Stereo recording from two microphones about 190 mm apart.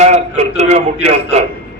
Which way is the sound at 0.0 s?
35° right (ahead or behind).